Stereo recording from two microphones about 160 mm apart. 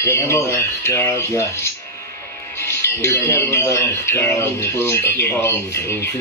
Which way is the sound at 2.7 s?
15° left (ahead or behind).